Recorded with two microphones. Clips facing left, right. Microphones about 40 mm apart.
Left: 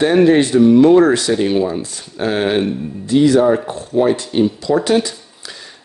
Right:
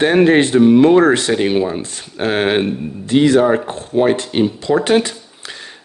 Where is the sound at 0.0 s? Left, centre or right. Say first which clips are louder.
Even; right.